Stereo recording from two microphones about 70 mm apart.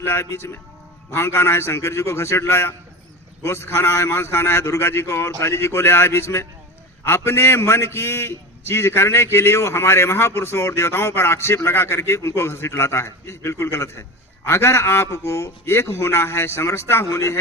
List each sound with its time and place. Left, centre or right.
0.0 s a man's voice: left